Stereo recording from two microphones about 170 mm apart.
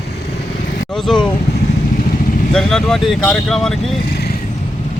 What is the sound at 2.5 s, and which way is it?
Speech, centre (ahead or behind).